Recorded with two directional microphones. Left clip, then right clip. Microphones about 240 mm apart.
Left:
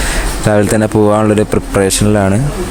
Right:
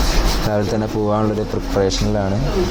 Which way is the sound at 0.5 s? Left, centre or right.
Left.